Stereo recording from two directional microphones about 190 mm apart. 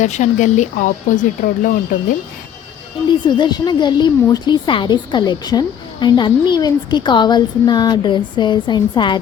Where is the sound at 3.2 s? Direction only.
25° left (ahead or behind).